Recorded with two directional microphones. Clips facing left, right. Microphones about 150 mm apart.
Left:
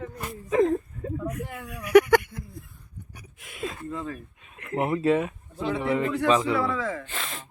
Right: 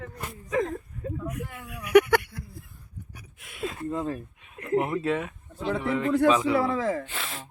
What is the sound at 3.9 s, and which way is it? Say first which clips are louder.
Speech: right 4 dB; 40° right (ahead or behind).